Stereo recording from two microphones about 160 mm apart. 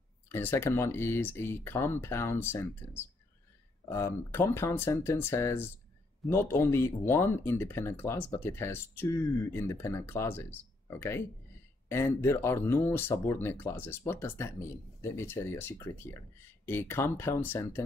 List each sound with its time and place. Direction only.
0.3 s speech: 15° left (ahead or behind)